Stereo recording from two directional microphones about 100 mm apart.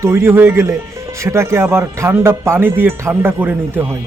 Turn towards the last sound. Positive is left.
turn(degrees=-20)  # may be behind; listen again after turning